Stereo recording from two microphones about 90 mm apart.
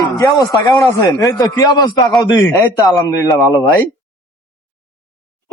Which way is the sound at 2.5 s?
40° left (ahead or behind).